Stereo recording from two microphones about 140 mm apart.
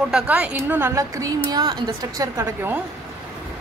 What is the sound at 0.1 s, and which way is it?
A woman's voice, 10° right (ahead or behind).